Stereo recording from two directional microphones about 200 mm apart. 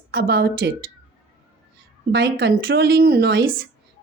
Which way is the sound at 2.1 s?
55° right (ahead or behind).